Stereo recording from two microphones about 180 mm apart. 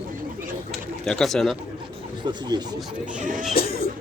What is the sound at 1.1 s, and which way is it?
Speech, centre (ahead or behind).